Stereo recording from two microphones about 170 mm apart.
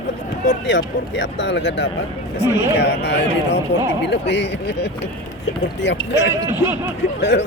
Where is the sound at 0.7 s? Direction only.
90° left.